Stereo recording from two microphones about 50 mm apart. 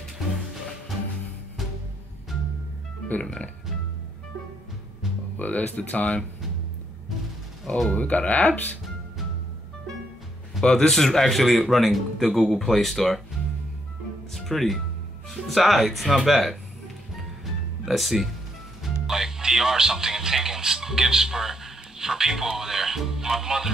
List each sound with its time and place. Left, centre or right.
3.2 s speech: left
5.4 s speech: left
7.9 s speech: left
10.6 s a man's voice: centre
11.0 s speech: centre
14.3 s music: centre
15.2 s speech: centre
17.8 s speech: centre
19.0 s music: centre